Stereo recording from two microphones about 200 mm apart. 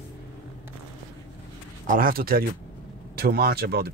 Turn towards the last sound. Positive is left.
turn(degrees=-50)  # may be behind; listen again after turning